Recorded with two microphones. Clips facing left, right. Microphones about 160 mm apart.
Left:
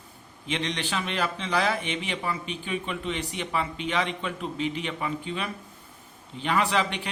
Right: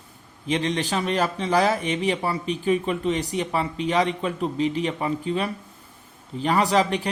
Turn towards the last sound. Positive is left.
turn(degrees=-40)  # may be behind; listen again after turning